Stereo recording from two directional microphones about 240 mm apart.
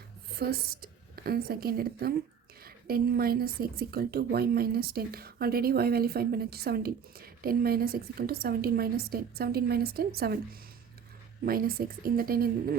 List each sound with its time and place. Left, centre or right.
0.3 s a woman's voice: right
11.4 s a woman's voice: right